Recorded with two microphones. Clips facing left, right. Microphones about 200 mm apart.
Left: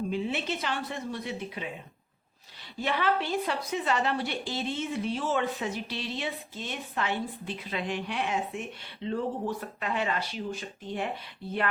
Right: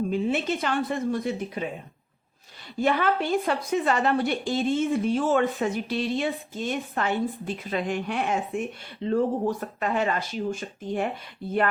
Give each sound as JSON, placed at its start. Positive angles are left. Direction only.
{"t": 0.1, "sound": "a woman's voice", "side_deg": -45}
{"t": 2.8, "sound": "a woman's voice", "side_deg": -50}